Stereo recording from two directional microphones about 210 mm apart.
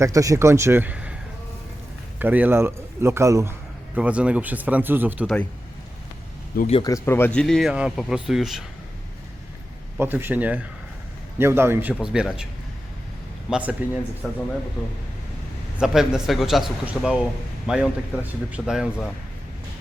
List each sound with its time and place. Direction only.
0.0 s speech: 15° right (ahead or behind)
2.1 s speech: 10° right (ahead or behind)
6.7 s speech: 25° left (ahead or behind)
6.9 s speech: 10° left (ahead or behind)
10.0 s speech: 10° right (ahead or behind)
13.5 s speech: 5° right (ahead or behind)
15.8 s speech: centre (ahead or behind)